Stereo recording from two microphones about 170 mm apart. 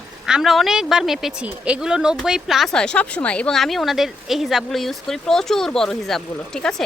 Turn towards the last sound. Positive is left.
turn(degrees=5)  # may be behind; listen again after turning